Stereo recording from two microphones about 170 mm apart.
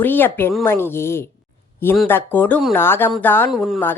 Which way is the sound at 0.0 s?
10° left (ahead or behind).